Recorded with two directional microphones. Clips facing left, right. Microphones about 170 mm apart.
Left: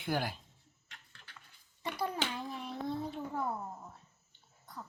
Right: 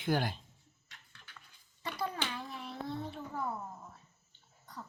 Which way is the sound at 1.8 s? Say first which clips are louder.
Left 2 dB; 15° left (ahead or behind).